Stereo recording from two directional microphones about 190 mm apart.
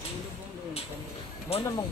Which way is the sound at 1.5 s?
30° left (ahead or behind).